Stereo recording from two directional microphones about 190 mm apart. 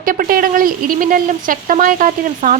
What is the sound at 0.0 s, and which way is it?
Speech, 45° right (ahead or behind).